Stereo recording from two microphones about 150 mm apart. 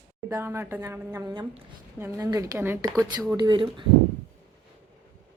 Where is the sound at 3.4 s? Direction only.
30° right (ahead or behind).